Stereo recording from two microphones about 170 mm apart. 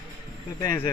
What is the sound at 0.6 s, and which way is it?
Speech, 15° left (ahead or behind).